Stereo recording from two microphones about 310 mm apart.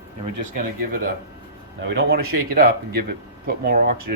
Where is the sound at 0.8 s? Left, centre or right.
Right.